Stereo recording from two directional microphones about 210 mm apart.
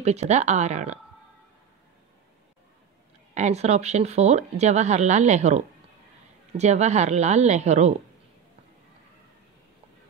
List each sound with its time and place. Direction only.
0.0 s speech: 30° right (ahead or behind)
3.3 s speech: 30° right (ahead or behind)